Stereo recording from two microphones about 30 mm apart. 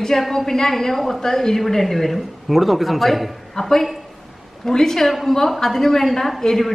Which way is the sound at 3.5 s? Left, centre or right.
Centre.